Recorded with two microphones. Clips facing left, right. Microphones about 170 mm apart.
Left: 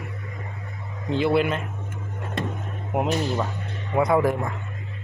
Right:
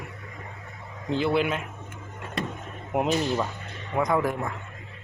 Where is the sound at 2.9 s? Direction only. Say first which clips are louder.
Even; 5° left (ahead or behind).